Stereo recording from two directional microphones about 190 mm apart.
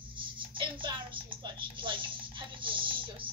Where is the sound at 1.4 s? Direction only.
25° right (ahead or behind).